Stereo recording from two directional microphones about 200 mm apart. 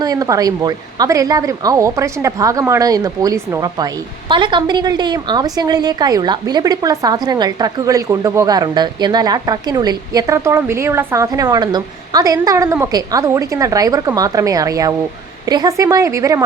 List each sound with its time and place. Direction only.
0.0 s a woman's voice: 20° right (ahead or behind)